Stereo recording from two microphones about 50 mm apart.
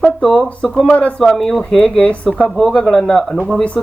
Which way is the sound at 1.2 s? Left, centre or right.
Centre.